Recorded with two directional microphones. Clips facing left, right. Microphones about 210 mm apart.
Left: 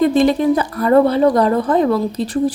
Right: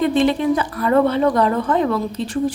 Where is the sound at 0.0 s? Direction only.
40° left (ahead or behind).